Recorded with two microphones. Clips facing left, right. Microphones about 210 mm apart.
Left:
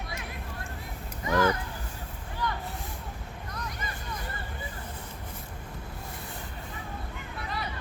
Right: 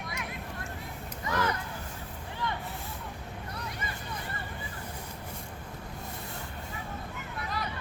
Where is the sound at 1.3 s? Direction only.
30° left (ahead or behind).